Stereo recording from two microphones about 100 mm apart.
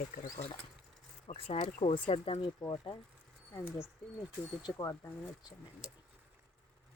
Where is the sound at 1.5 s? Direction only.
80° left.